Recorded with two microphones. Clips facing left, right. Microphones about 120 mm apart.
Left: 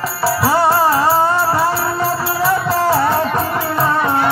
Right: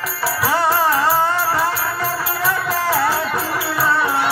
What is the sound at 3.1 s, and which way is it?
Music, 45° left (ahead or behind).